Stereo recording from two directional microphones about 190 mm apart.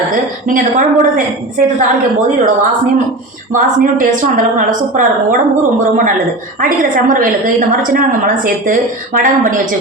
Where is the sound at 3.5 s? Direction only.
45° right (ahead or behind).